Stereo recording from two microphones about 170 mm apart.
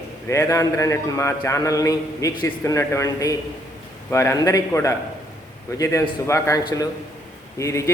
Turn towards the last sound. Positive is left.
turn(degrees=15)  # may be behind; listen again after turning